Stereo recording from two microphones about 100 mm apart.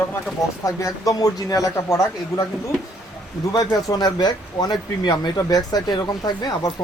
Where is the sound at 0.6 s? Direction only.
30° left (ahead or behind).